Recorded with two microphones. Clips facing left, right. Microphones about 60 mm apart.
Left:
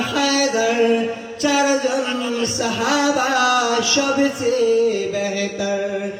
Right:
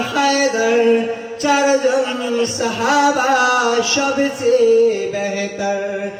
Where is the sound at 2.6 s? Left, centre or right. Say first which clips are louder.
Right 4 dB; right.